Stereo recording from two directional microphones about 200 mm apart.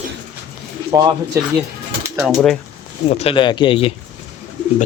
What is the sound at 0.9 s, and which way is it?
Speech, 15° right (ahead or behind).